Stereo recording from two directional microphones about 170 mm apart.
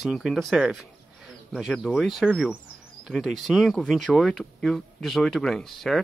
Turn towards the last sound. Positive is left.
turn(degrees=0)  # may be behind; listen again after turning